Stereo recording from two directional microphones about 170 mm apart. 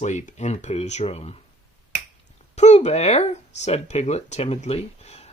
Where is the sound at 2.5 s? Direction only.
40° left (ahead or behind).